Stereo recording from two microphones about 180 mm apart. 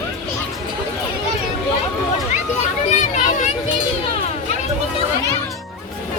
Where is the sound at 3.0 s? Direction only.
40° left (ahead or behind).